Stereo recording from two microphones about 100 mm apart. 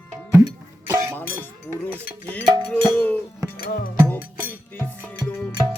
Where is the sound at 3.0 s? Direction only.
15° left (ahead or behind).